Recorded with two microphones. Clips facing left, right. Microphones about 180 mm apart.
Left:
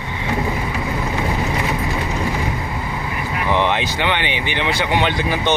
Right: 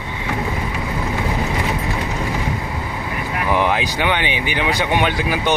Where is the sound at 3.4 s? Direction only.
5° right (ahead or behind).